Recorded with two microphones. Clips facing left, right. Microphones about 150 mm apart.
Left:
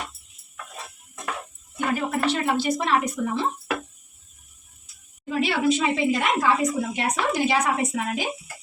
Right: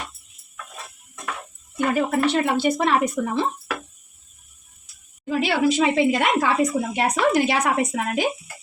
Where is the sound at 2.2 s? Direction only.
60° right (ahead or behind).